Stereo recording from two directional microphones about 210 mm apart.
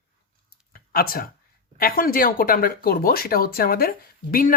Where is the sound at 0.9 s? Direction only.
45° left (ahead or behind).